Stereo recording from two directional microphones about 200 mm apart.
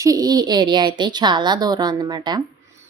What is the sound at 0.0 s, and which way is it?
A woman's voice, 15° right (ahead or behind).